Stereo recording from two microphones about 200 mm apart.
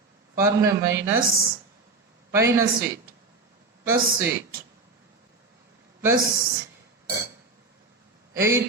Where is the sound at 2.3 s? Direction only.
15° right (ahead or behind).